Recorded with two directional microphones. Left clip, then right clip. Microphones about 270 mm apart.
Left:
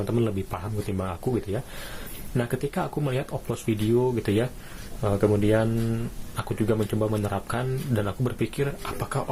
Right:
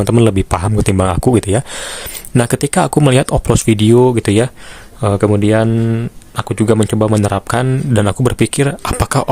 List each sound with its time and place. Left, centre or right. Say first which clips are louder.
0.0 s speech: right 14 dB; right